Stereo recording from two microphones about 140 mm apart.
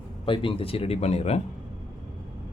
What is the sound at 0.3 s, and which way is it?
Speech, 40° left (ahead or behind).